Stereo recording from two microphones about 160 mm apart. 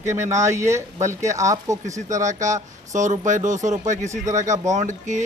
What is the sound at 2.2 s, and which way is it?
Speech, 50° right (ahead or behind).